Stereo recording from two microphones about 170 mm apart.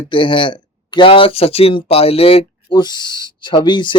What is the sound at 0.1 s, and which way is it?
Speech, 30° left (ahead or behind).